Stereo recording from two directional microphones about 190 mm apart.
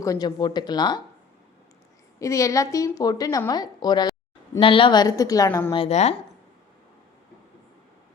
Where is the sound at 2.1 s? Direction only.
15° left (ahead or behind).